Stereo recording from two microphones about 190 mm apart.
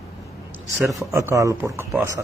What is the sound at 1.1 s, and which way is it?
Speech, 15° right (ahead or behind).